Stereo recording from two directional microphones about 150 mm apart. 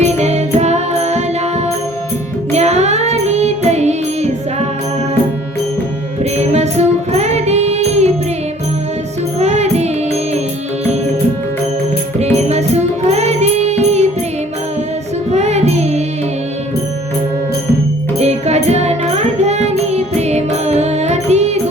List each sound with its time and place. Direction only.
0.0 s music: 45° right (ahead or behind)
6.3 s music: 45° right (ahead or behind)
9.4 s music: 45° right (ahead or behind)
12.2 s music: 45° right (ahead or behind)
15.3 s music: 45° right (ahead or behind)
18.2 s music: 45° right (ahead or behind)